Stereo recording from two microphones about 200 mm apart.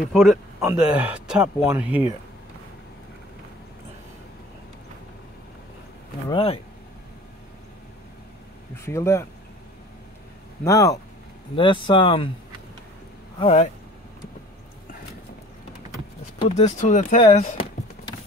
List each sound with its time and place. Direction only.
0.1 s speech: centre (ahead or behind)
6.3 s speech: 25° left (ahead or behind)
8.7 s speech: 15° left (ahead or behind)
10.6 s speech: 15° left (ahead or behind)
13.4 s speech: 30° left (ahead or behind)
16.4 s speech: 35° left (ahead or behind)